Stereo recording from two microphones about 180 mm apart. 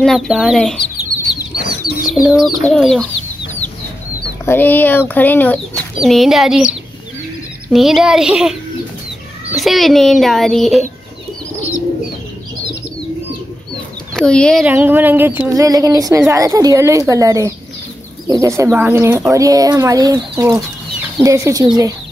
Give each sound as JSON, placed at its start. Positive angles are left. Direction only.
{"t": 0.0, "sound": "child singing", "side_deg": 0}
{"t": 2.1, "sound": "child singing", "side_deg": -5}
{"t": 4.5, "sound": "speech", "side_deg": 10}
{"t": 6.0, "sound": "child singing", "side_deg": 0}
{"t": 7.7, "sound": "child singing", "side_deg": 0}
{"t": 9.6, "sound": "child singing", "side_deg": 0}
{"t": 14.1, "sound": "child singing", "side_deg": 5}
{"t": 14.7, "sound": "speech", "side_deg": -10}